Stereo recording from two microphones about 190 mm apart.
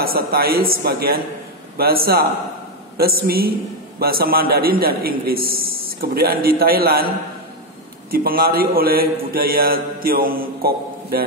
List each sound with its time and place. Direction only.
0.0 s speech: 55° right (ahead or behind)
8.1 s speech: 50° right (ahead or behind)